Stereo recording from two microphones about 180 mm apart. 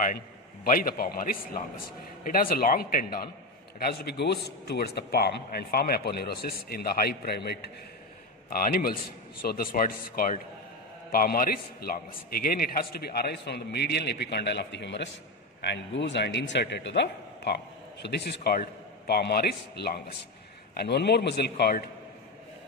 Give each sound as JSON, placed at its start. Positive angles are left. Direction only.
{"t": 0.7, "sound": "a man's voice", "side_deg": 55}